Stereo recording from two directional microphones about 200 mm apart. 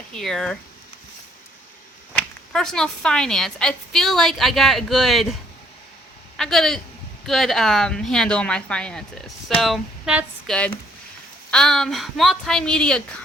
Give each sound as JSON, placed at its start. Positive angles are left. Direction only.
{"t": 0.1, "sound": "speech", "side_deg": 0}
{"t": 2.5, "sound": "speech", "side_deg": 5}
{"t": 6.3, "sound": "speech", "side_deg": 0}